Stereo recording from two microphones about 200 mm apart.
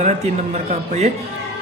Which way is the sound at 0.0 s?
35° right (ahead or behind).